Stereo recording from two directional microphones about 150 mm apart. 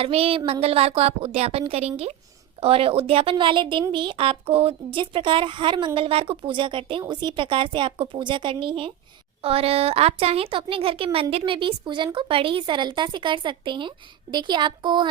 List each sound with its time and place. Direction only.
0.0 s a woman's voice: 40° right (ahead or behind)